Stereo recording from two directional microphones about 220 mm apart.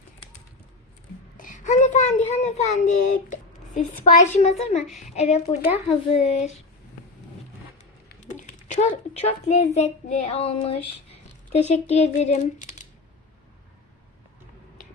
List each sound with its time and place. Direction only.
1.4 s a child's voice: 35° left (ahead or behind)
8.1 s a sound: 35° left (ahead or behind)
9.1 s a woman's voice: 30° left (ahead or behind)